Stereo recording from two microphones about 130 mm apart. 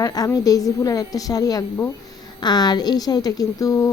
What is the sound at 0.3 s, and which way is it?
A woman's voice, 25° left (ahead or behind).